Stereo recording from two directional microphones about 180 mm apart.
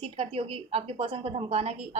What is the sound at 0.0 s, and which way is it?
A woman's voice, 30° right (ahead or behind).